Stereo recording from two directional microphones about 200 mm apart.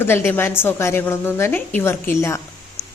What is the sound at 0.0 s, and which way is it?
Speech, 10° left (ahead or behind).